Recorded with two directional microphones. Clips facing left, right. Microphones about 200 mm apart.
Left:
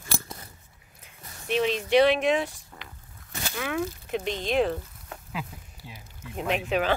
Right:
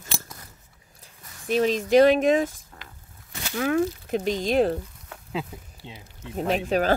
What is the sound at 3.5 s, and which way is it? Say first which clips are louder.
A child's voice: right 7 dB; 45° right (ahead or behind).